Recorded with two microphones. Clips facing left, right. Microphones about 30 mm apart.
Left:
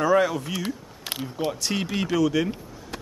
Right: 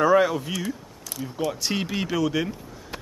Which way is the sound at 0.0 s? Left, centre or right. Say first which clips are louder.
Right 2 dB; centre.